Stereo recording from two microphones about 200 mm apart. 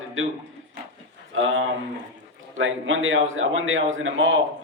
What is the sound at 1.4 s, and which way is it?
A man's voice, 80° right.